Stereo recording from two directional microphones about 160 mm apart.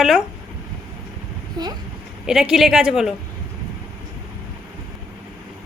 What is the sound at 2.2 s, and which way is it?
Speech, 5° right (ahead or behind).